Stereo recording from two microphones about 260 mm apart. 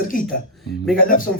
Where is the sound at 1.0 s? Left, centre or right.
Left.